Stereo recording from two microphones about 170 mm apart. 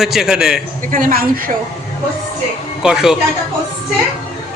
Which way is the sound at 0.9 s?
55° right (ahead or behind).